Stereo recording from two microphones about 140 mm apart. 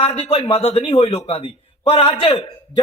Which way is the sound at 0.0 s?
40° left (ahead or behind).